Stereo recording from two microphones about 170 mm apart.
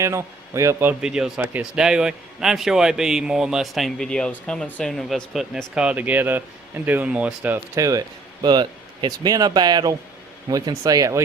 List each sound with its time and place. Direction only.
0.0 s a man's voice: 15° right (ahead or behind)